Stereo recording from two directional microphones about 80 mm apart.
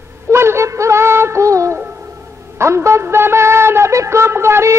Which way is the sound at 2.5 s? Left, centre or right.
Right.